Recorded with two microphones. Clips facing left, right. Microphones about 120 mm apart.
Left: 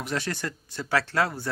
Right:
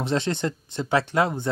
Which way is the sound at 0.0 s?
25° right (ahead or behind).